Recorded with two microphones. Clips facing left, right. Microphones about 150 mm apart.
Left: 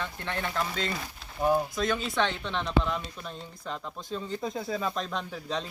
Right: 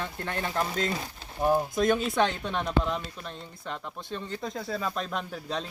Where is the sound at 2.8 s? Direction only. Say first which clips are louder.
Left 1 dB; 10° left (ahead or behind).